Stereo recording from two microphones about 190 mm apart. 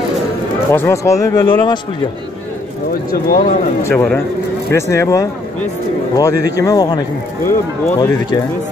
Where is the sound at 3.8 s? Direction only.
15° left (ahead or behind).